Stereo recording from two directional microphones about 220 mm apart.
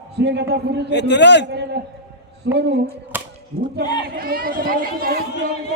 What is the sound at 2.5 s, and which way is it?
Speech, 50° right (ahead or behind).